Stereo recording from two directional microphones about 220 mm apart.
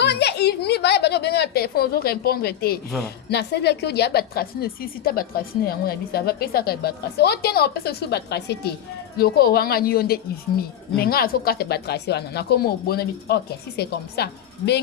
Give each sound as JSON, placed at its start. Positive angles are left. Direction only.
{"t": 0.0, "sound": "a woman's voice", "side_deg": 50}